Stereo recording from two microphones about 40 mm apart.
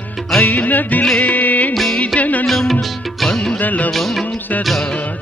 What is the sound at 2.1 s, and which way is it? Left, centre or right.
Music, left.